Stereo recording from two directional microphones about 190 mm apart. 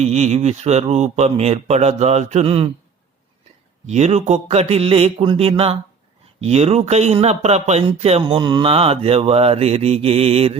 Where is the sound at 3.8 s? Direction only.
35° right (ahead or behind).